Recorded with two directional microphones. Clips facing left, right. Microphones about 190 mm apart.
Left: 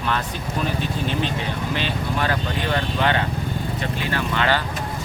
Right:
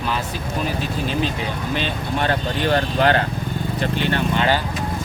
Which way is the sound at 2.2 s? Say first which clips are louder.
Right 5 dB; 30° right (ahead or behind).